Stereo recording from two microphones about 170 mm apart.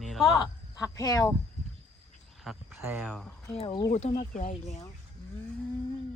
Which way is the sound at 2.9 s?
10° right (ahead or behind).